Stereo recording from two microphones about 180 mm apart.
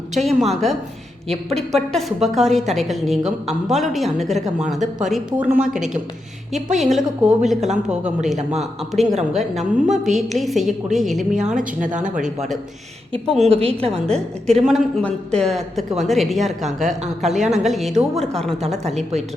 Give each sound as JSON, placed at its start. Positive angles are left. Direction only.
{"t": 0.3, "sound": "speech", "side_deg": 0}
{"t": 13.5, "sound": "a woman's voice", "side_deg": -35}
{"t": 14.6, "sound": "speech", "side_deg": 0}
{"t": 18.9, "sound": "a woman's voice", "side_deg": -40}